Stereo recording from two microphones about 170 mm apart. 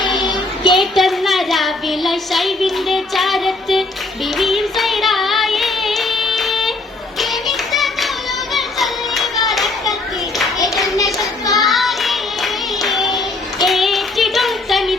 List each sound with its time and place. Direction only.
0.0 s music: 25° left (ahead or behind)
0.8 s a sound: centre (ahead or behind)
4.4 s music: centre (ahead or behind)
9.5 s children playing: centre (ahead or behind)
11.6 s child singing: centre (ahead or behind)
13.1 s child singing: 25° left (ahead or behind)
13.7 s child singing: centre (ahead or behind)